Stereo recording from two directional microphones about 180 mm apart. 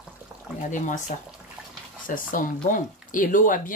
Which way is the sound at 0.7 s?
45° left (ahead or behind).